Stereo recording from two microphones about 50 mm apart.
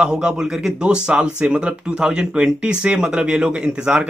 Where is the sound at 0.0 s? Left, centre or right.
Centre.